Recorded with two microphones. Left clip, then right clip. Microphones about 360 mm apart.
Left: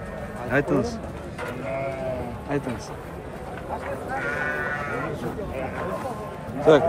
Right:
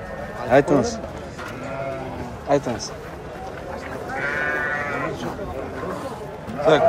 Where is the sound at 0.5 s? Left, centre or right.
Centre.